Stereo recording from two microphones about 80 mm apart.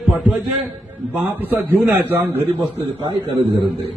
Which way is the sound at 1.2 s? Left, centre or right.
Right.